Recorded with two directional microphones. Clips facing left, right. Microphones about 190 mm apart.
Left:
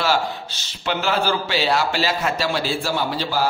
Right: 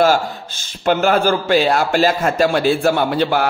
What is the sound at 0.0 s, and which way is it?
A man's voice, 50° right (ahead or behind).